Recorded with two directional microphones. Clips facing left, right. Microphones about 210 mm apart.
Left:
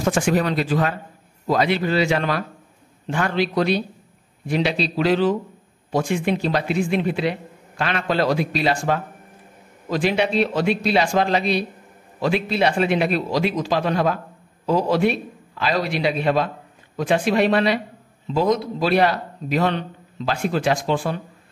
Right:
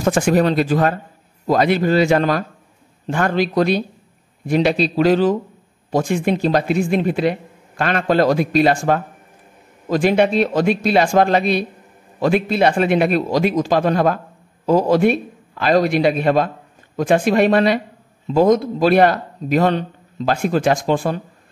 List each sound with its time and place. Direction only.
0.0 s a man's voice: 40° right (ahead or behind)